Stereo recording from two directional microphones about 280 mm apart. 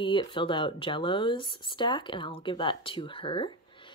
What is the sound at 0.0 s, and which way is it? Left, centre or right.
Speech, centre.